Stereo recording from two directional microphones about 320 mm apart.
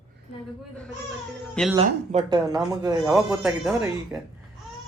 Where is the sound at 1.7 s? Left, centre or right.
Centre.